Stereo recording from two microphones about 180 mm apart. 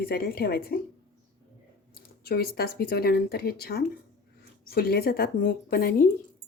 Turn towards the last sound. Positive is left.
turn(degrees=55)  # may be behind; listen again after turning